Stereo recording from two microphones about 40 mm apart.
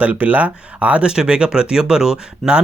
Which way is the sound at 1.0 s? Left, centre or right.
Right.